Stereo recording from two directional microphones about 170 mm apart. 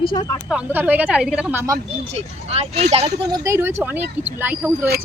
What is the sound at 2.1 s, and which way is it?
Speech, 40° right (ahead or behind).